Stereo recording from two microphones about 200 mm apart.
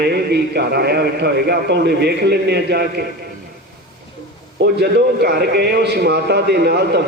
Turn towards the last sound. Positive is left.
turn(degrees=-55)  # may be behind; listen again after turning